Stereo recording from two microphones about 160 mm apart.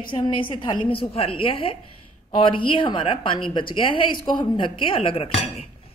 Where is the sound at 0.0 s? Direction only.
30° left (ahead or behind).